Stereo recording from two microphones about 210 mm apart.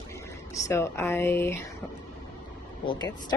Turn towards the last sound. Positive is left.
turn(degrees=20)  # may be behind; listen again after turning